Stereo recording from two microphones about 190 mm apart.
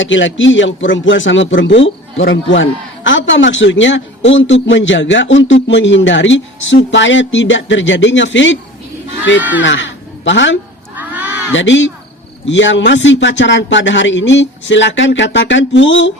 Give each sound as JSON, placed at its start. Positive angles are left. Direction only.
{"t": 0.0, "sound": "speech", "side_deg": 80}
{"t": 9.6, "sound": "speech", "side_deg": 75}
{"t": 10.9, "sound": "a sound", "side_deg": -10}
{"t": 11.5, "sound": "speech", "side_deg": 80}